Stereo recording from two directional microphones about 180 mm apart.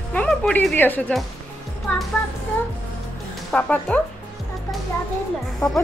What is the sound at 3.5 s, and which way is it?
Speech, 5° left (ahead or behind).